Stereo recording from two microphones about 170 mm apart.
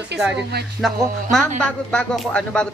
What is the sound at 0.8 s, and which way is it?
Speech, centre (ahead or behind).